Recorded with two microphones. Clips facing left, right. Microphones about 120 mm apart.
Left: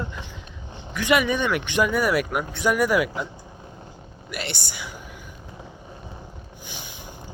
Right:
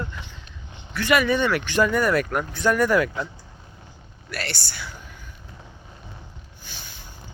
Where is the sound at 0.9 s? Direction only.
15° left (ahead or behind).